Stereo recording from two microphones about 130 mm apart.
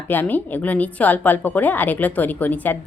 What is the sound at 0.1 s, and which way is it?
Speech, 15° left (ahead or behind).